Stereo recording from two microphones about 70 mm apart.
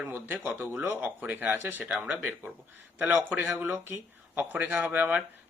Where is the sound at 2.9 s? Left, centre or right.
Right.